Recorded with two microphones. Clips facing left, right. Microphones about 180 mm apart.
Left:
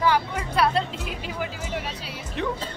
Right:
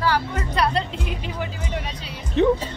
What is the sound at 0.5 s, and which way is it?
Speech, 5° left (ahead or behind).